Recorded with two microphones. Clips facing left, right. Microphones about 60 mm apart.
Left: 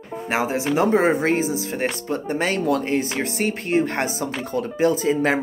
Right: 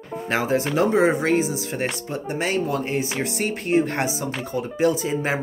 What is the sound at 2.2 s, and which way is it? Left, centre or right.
Speech, left.